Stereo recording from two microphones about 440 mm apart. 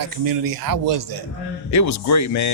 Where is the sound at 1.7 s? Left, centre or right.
Left.